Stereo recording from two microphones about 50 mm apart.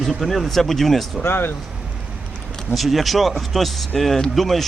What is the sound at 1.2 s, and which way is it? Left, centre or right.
Speech, left.